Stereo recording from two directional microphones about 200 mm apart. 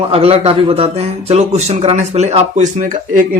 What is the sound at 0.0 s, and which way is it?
Speech, 30° right (ahead or behind).